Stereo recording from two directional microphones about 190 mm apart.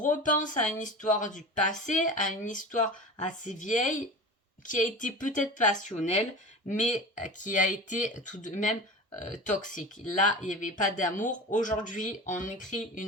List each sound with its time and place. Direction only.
0.0 s speech: 40° left (ahead or behind)